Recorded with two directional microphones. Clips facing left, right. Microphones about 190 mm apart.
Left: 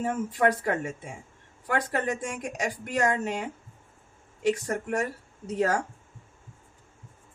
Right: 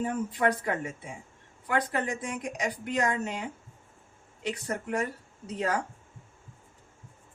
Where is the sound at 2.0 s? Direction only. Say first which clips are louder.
Left 3 dB; 45° left (ahead or behind).